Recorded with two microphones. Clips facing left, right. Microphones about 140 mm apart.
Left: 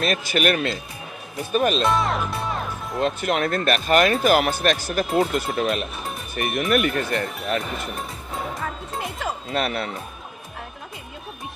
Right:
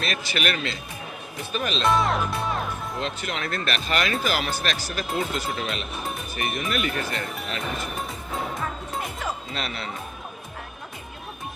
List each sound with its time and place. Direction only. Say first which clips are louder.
0.0 s speech: left 6 dB; 45° left (ahead or behind)
1.8 s music: even; centre (ahead or behind)
3.0 s speech: left 11 dB; 50° left (ahead or behind)
9.5 s speech: left 7 dB; 55° left (ahead or behind)